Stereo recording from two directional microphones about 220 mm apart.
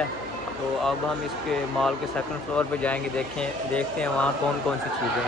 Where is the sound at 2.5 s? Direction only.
5° left (ahead or behind).